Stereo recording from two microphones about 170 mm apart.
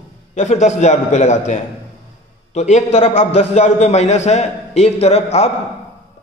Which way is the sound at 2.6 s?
40° left (ahead or behind).